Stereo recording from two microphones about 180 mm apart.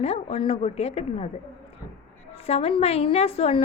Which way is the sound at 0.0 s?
35° left (ahead or behind).